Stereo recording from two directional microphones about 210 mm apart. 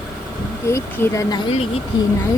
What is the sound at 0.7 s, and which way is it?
Speech, 10° left (ahead or behind).